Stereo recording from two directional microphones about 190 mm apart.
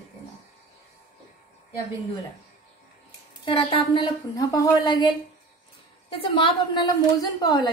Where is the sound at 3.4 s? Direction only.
25° left (ahead or behind).